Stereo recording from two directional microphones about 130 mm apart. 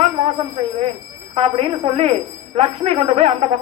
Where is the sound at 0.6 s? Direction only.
50° right (ahead or behind).